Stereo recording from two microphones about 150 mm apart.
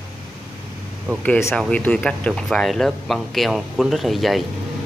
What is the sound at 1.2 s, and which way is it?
Speech, 10° left (ahead or behind).